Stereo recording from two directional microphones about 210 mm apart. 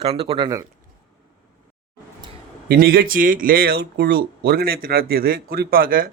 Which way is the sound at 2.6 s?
45° right (ahead or behind).